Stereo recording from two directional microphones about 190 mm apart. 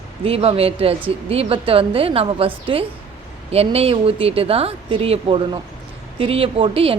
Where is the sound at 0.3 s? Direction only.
30° right (ahead or behind).